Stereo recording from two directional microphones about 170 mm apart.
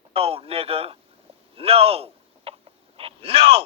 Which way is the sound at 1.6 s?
35° right (ahead or behind).